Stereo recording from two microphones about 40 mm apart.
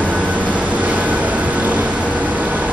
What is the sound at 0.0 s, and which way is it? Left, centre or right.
Vehicle, right.